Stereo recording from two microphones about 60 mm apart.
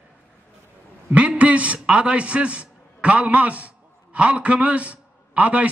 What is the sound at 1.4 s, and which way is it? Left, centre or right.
A man's voice, right.